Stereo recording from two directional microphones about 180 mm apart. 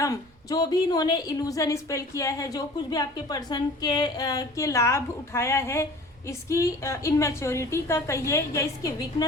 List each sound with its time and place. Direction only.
0.0 s a woman's voice: 20° left (ahead or behind)